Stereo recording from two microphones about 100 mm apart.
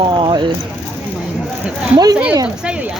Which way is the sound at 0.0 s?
50° right (ahead or behind).